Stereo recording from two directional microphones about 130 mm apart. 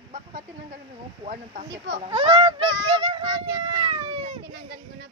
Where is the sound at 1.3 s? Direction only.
70° right (ahead or behind).